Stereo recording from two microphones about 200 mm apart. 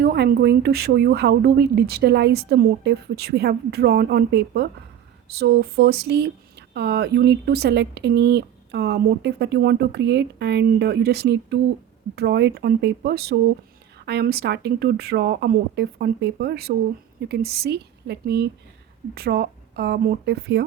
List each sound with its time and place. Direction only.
0.0 s speech: 50° right (ahead or behind)